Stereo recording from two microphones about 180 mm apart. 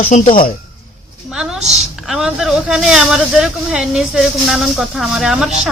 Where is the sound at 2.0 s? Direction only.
Centre (ahead or behind).